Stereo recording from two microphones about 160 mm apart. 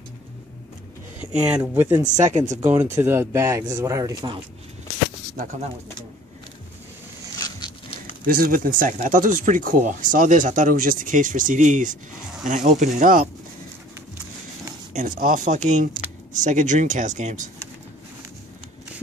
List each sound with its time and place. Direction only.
1.5 s speech: 10° right (ahead or behind)
2.0 s speech: 50° right (ahead or behind)
2.6 s speech: 15° right (ahead or behind)
5.4 s speech: 50° right (ahead or behind)
7.3 s a sound: 25° left (ahead or behind)
8.3 s speech: 60° right (ahead or behind)
15.0 s speech: 60° right (ahead or behind)